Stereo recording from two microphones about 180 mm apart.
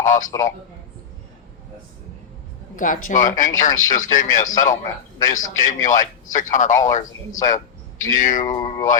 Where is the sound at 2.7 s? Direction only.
45° left (ahead or behind).